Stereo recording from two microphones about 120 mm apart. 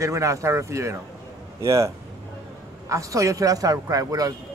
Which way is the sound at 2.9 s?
25° right (ahead or behind).